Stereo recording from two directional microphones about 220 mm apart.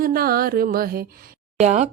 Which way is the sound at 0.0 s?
40° right (ahead or behind).